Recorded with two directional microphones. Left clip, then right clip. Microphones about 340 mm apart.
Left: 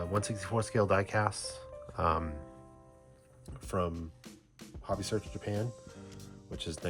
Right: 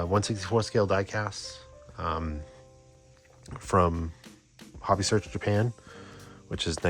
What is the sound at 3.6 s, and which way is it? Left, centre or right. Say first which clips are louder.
Speech: right 10 dB; right.